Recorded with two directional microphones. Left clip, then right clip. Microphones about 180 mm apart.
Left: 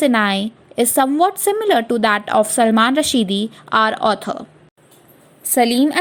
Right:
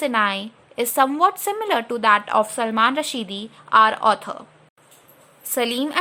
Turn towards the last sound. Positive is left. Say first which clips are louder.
# left 7 dB
turn(degrees=20)  # may be behind; listen again after turning